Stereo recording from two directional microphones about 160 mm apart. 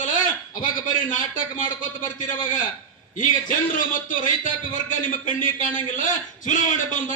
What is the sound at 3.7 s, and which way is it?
A man's voice, 55° left (ahead or behind).